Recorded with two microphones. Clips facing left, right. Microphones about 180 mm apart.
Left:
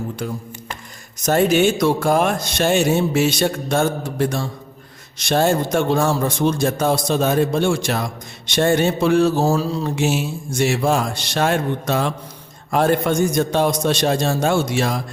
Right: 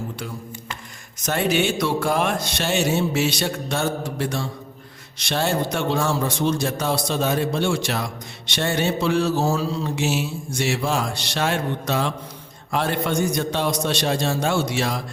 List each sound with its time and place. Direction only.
1.2 s a man's voice: 40° left (ahead or behind)